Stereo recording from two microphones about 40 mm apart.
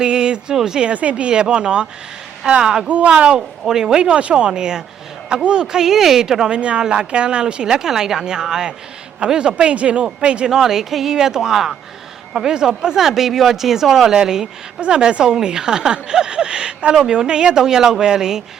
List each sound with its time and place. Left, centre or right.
0.0 s speech: right
0.9 s speech: right; by 6.5 s centre
6.5 s speech: right
9.2 s speech: right
10.5 s speech: centre